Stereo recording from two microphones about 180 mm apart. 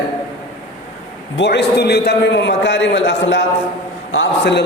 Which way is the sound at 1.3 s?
70° left (ahead or behind).